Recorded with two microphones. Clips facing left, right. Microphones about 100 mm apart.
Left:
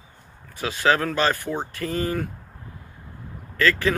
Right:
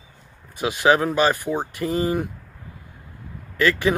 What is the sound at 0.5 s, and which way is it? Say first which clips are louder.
Speech: right 3 dB; 20° right (ahead or behind).